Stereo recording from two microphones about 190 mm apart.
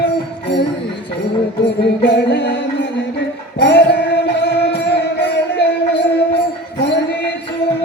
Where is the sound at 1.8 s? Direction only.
65° left (ahead or behind).